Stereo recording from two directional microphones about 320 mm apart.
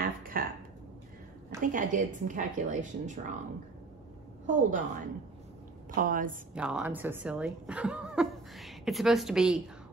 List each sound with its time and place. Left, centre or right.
0.0 s a sound: right
1.6 s a woman's voice: right
4.5 s a woman's voice: right
5.9 s a woman's voice: right
6.5 s speech: centre